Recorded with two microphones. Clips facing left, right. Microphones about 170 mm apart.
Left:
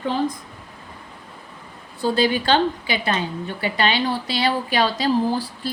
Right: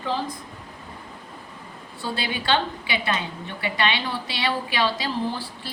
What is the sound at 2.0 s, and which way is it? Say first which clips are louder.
A woman's voice: left 10 dB; 40° left (ahead or behind).